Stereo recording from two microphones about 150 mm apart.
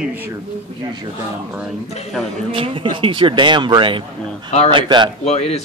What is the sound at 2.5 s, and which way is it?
Speech, 35° right (ahead or behind).